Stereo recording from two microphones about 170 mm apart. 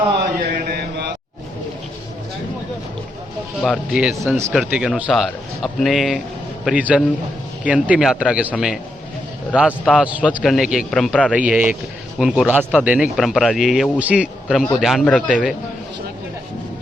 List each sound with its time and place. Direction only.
0.7 s mantra: 75° right (ahead or behind)
3.6 s a man's voice: centre (ahead or behind)